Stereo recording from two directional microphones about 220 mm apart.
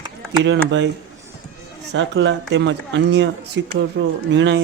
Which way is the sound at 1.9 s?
55° right (ahead or behind).